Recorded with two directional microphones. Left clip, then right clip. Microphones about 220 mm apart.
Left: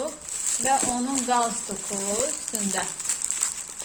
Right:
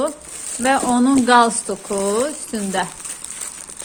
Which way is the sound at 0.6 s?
35° right (ahead or behind).